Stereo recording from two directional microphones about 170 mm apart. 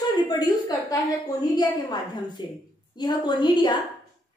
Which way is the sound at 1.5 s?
25° left (ahead or behind).